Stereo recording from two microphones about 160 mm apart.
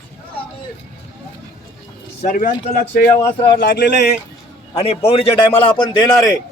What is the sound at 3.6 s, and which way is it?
Speech, 75° left (ahead or behind).